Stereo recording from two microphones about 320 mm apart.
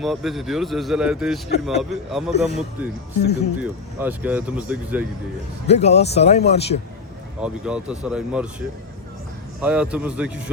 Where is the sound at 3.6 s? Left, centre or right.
Centre.